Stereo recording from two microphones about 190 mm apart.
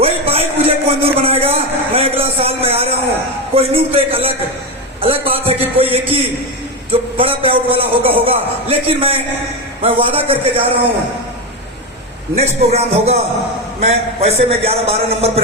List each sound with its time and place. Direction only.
0.0 s a sound: 30° right (ahead or behind)
3.5 s a man's voice: 30° right (ahead or behind)
12.4 s a man's voice: 35° right (ahead or behind)